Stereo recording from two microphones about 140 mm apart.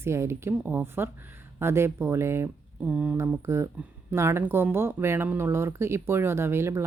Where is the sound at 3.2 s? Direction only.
20° right (ahead or behind).